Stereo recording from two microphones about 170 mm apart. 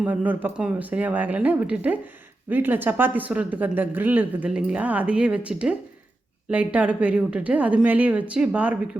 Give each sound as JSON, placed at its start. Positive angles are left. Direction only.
{"t": 0.0, "sound": "speech", "side_deg": -10}